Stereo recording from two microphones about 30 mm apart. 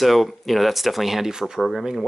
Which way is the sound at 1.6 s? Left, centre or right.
Centre.